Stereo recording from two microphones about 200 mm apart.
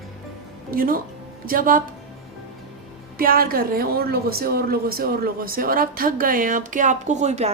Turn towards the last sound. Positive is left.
turn(degrees=-35)  # may be behind; listen again after turning